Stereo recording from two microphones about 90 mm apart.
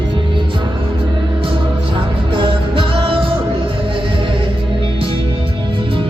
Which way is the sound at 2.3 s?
70° right (ahead or behind).